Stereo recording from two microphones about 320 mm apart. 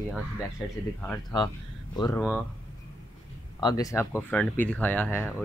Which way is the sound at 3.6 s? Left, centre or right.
Centre.